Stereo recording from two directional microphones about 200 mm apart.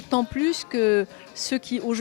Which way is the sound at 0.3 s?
10° left (ahead or behind).